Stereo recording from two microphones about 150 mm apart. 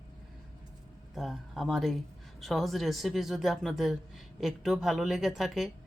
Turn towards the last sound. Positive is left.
turn(degrees=0)  # may be behind; listen again after turning